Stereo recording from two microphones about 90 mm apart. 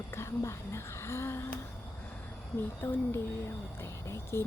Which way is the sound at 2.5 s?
25° left (ahead or behind).